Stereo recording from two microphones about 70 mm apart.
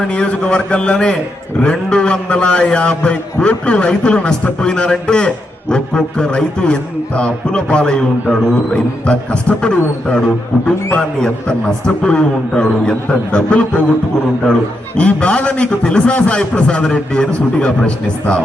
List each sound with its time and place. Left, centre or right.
0.0 s a man's voice: centre
14.9 s a man's voice: centre